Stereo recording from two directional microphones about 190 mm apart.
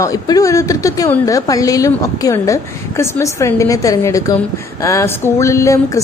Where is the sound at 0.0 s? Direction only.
20° left (ahead or behind).